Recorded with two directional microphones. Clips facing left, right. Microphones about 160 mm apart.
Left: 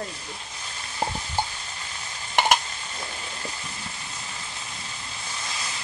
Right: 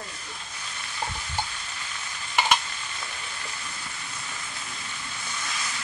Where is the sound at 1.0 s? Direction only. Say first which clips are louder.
Left 5 dB; 35° left (ahead or behind).